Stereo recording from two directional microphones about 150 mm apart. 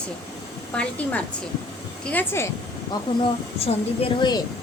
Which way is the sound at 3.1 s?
30° left (ahead or behind).